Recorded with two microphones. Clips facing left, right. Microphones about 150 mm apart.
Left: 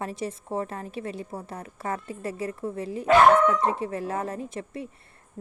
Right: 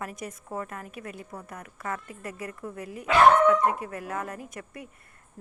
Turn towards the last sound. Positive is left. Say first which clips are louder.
# left 6 dB
turn(degrees=25)  # may be behind; listen again after turning